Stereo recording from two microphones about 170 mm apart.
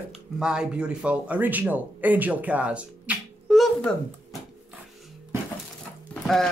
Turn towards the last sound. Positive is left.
turn(degrees=5)  # may be behind; listen again after turning